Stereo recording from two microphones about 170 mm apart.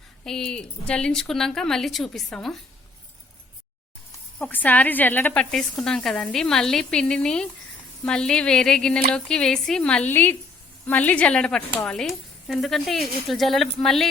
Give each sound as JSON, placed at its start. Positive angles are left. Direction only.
{"t": 0.3, "sound": "a woman's voice", "side_deg": 5}
{"t": 4.4, "sound": "a woman's voice", "side_deg": 10}